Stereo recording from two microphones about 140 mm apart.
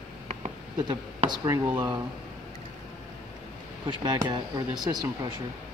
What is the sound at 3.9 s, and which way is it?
Speech, 30° right (ahead or behind).